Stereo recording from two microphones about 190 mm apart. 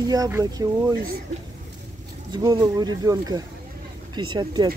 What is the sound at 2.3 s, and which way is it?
Speech, 20° right (ahead or behind).